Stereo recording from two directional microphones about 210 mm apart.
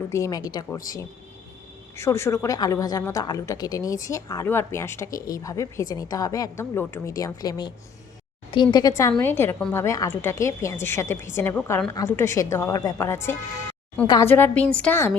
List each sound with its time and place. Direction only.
0.1 s a woman's voice: 15° left (ahead or behind)
2.0 s a woman's voice: 15° left (ahead or behind)